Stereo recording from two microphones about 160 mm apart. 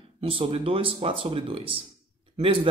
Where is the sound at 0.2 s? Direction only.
35° right (ahead or behind).